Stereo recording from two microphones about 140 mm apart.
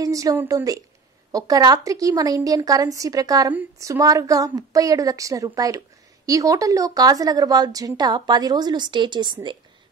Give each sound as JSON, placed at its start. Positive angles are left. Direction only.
{"t": 0.0, "sound": "a woman's voice", "side_deg": -25}